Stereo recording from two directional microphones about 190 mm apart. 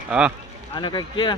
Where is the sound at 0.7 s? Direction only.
25° left (ahead or behind).